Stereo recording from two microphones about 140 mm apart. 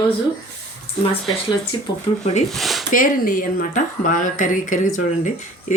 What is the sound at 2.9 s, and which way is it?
Speech, 75° left (ahead or behind).